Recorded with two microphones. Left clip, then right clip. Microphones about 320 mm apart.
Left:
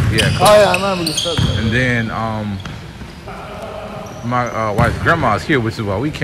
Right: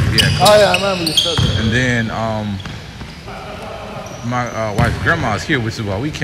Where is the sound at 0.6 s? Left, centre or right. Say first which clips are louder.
Even; left.